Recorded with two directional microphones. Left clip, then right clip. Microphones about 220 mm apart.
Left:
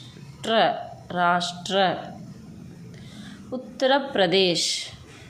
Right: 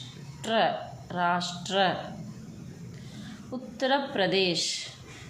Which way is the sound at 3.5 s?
20° left (ahead or behind).